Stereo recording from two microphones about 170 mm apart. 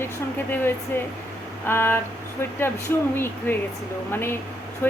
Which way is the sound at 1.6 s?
10° left (ahead or behind).